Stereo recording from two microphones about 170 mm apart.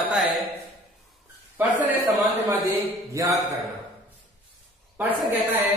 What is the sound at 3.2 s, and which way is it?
Speech, 15° right (ahead or behind).